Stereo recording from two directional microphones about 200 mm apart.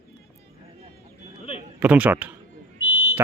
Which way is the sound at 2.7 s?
90° left.